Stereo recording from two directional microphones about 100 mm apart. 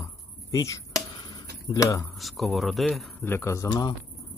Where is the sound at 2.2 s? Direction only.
Centre (ahead or behind).